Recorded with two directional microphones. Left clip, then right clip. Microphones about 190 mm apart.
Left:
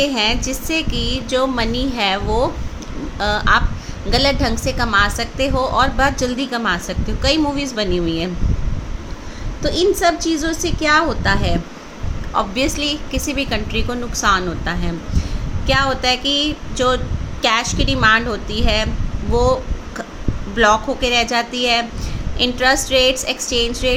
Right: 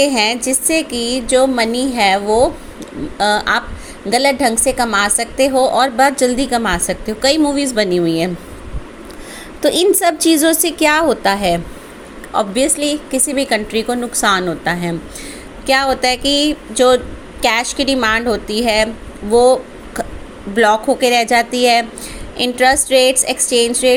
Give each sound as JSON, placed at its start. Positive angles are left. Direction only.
{"t": 0.0, "sound": "a woman's voice", "side_deg": -20}
{"t": 9.6, "sound": "a woman's voice", "side_deg": -40}
{"t": 20.6, "sound": "a woman's voice", "side_deg": -25}